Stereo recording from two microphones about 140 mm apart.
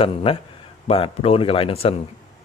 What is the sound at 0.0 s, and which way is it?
Speech, 40° left (ahead or behind).